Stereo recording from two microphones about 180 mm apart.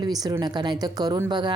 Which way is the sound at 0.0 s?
20° right (ahead or behind).